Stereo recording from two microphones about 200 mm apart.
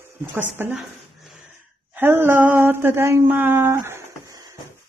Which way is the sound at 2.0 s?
10° right (ahead or behind).